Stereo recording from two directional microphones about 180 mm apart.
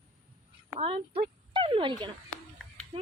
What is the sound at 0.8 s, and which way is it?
Speech, 30° right (ahead or behind).